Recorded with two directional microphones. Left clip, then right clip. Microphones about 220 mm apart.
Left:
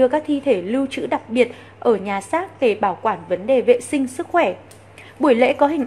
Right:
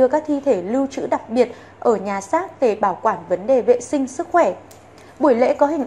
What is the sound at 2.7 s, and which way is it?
A woman's voice, 20° left (ahead or behind).